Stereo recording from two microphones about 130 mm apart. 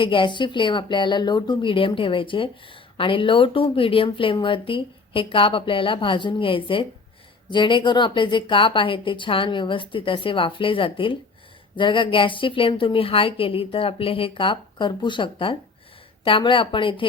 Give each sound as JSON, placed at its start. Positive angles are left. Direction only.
{"t": 0.0, "sound": "a woman's voice", "side_deg": 40}